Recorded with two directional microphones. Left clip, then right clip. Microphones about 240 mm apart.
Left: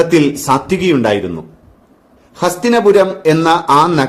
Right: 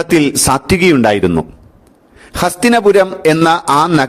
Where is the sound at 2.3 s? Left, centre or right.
Right.